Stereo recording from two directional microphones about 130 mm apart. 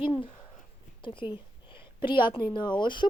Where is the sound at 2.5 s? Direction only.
35° left (ahead or behind).